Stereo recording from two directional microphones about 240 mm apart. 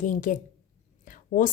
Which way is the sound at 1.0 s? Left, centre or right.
Left.